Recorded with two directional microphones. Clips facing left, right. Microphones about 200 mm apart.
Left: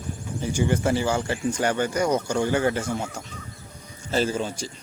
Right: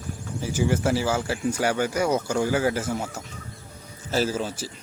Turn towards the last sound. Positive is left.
turn(degrees=-5)  # may be behind; listen again after turning